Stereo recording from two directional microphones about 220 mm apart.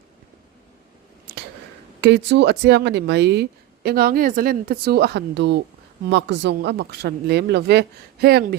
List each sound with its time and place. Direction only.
2.0 s speech: 50° right (ahead or behind)